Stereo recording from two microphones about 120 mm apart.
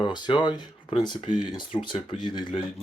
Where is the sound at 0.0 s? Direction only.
40° left (ahead or behind).